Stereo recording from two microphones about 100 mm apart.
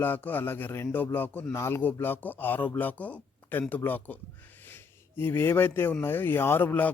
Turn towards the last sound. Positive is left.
turn(degrees=20)  # may be behind; listen again after turning